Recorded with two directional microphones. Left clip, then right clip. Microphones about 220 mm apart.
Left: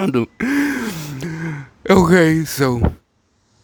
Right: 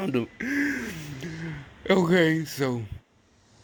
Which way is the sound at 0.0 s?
35° left (ahead or behind).